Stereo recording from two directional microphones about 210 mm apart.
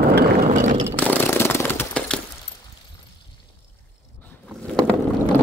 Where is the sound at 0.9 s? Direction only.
10° left (ahead or behind).